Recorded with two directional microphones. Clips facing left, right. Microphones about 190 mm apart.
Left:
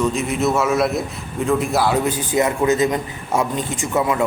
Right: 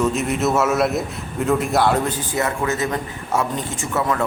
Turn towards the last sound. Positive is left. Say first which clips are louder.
# left 2 dB
turn(degrees=15)  # may be behind; listen again after turning